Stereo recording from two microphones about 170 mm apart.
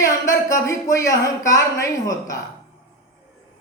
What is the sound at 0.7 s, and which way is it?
Speech, 20° left (ahead or behind).